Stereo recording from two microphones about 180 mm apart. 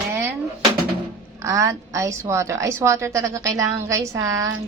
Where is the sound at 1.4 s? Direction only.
15° right (ahead or behind).